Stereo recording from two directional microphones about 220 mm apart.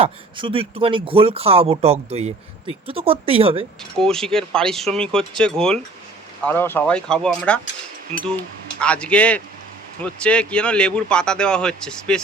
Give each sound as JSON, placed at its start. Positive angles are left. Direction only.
{"t": 0.0, "sound": "speech", "side_deg": -25}
{"t": 3.9, "sound": "speech", "side_deg": 0}
{"t": 8.8, "sound": "speech", "side_deg": 5}